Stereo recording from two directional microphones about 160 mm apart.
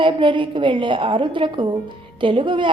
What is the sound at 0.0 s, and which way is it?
A woman's voice, 30° right (ahead or behind).